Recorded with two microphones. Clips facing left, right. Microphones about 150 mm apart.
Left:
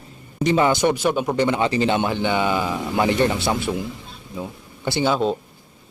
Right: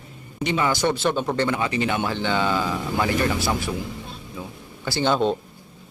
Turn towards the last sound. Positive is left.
turn(degrees=0)  # may be behind; listen again after turning